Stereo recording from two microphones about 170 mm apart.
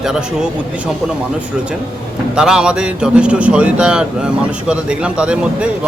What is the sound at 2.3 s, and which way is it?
A man's voice, 5° right (ahead or behind).